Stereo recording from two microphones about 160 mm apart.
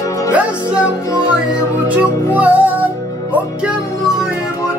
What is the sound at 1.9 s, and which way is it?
Music, 10° right (ahead or behind).